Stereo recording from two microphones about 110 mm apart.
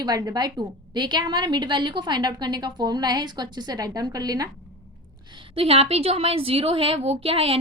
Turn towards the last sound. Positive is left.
turn(degrees=-60)  # may be behind; listen again after turning